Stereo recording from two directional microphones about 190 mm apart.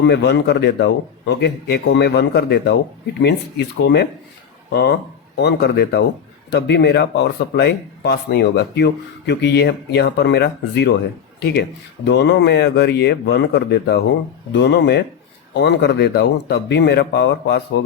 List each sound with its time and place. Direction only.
0.1 s speech: 65° left (ahead or behind)